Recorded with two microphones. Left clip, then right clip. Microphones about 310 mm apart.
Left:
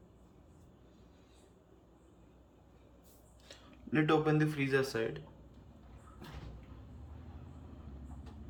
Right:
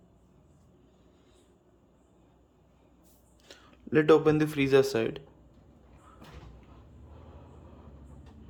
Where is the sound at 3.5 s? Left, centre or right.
Centre.